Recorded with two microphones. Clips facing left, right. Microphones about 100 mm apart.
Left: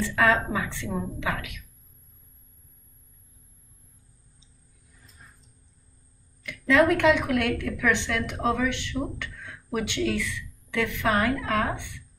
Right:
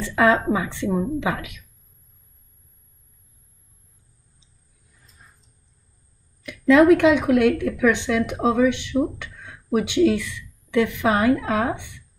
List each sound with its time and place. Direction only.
0.1 s a woman's voice: 20° right (ahead or behind)
6.4 s a woman's voice: 20° right (ahead or behind)